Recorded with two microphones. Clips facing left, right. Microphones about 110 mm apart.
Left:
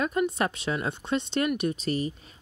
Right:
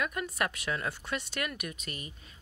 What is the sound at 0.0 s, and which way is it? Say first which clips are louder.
Speech: left 7 dB; 25° left (ahead or behind).